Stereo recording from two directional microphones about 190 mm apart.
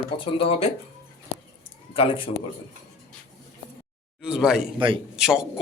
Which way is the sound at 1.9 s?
30° left (ahead or behind).